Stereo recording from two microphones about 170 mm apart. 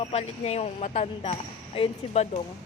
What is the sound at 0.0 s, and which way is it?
Speech, 40° left (ahead or behind).